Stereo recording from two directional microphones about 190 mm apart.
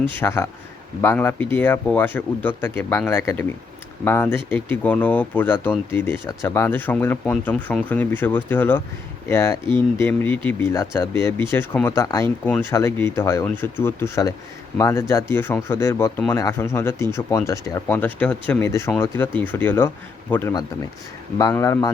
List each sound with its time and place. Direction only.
0.2 s speech: 15° left (ahead or behind)